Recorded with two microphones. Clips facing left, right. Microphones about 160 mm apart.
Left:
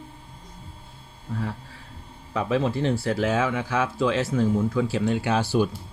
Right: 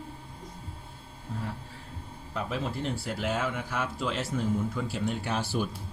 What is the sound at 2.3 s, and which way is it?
Speech, 80° left.